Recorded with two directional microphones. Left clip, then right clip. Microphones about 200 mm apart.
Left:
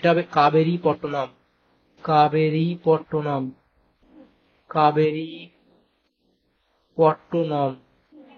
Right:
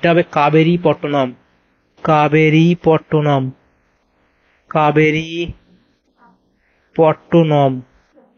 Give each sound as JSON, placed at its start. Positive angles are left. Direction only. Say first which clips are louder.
{"t": 0.0, "sound": "speech", "louder": "right 5 dB", "side_deg": -25}
{"t": 4.6, "sound": "speech", "louder": "right 6 dB", "side_deg": -30}
{"t": 7.0, "sound": "speech", "louder": "right 7 dB", "side_deg": -25}